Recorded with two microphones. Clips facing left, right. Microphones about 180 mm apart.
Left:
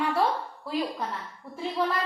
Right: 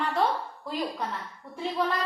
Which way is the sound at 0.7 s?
5° left (ahead or behind).